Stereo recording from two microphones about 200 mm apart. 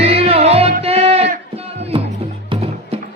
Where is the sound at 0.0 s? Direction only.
30° right (ahead or behind).